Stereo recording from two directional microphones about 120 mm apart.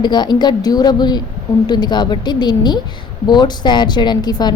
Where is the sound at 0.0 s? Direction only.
35° left (ahead or behind).